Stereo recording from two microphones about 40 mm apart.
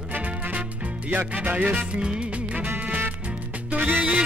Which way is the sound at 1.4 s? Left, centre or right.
Right.